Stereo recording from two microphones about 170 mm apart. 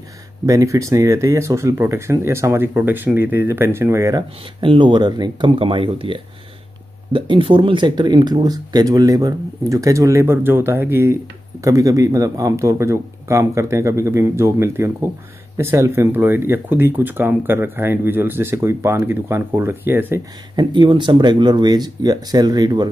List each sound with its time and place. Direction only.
0.5 s speech: 20° right (ahead or behind)
4.6 s speech: 30° right (ahead or behind); by 20.2 s 10° right (ahead or behind)
20.5 s speech: 30° right (ahead or behind)